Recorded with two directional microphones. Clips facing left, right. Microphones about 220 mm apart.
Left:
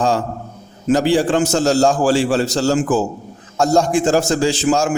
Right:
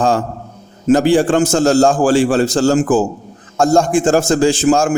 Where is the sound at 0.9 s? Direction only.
50° right (ahead or behind).